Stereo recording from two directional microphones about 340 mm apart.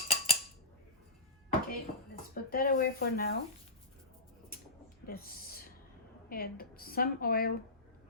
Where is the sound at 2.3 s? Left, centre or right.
Left.